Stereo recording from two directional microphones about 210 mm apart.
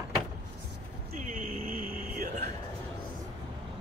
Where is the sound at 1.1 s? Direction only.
40° right (ahead or behind).